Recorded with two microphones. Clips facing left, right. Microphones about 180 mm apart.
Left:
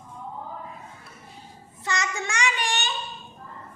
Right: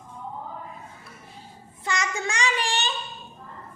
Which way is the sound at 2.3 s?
35° right (ahead or behind).